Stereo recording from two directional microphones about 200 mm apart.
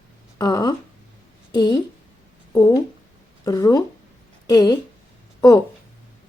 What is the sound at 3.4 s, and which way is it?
A woman's voice, 15° left (ahead or behind).